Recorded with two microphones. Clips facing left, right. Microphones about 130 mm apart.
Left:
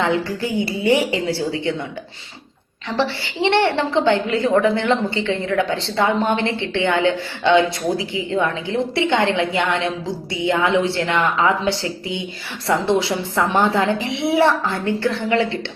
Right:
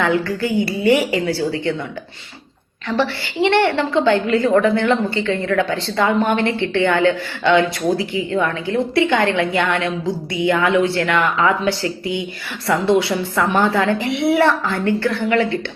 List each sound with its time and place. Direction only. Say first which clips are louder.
0.4 s a woman's voice: right 3 dB; 25° left (ahead or behind)
2.9 s a woman's voice: right 2 dB; 25° left (ahead or behind)